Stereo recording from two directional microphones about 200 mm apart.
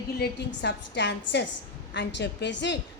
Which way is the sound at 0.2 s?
60° left (ahead or behind).